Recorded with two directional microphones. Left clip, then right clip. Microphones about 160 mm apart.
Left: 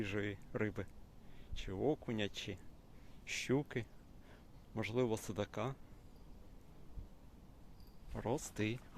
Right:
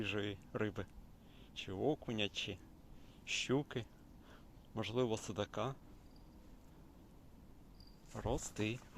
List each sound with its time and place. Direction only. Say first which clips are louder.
0.0 s speech: even; 10° left (ahead or behind)
8.1 s speech: left 1 dB; 25° left (ahead or behind)